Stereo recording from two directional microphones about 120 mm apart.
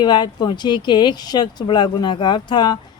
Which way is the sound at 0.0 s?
35° left (ahead or behind).